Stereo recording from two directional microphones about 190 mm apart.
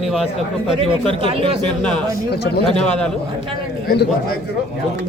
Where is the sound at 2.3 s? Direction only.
60° left (ahead or behind).